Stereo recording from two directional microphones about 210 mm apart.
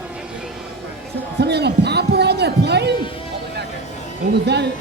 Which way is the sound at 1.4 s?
50° right (ahead or behind).